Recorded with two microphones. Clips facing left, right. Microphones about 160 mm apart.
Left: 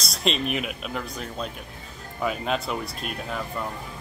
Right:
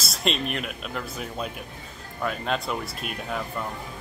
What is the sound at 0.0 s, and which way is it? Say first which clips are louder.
Speech: left 1 dB; centre (ahead or behind).